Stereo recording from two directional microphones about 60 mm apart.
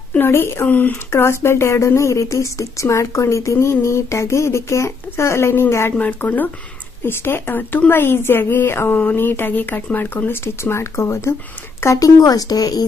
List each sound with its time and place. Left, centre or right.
0.2 s speech: left
0.7 s speech: left
1.1 s speech: left
5.9 s speech: left
7.1 s a woman's voice: left
11.8 s speech: left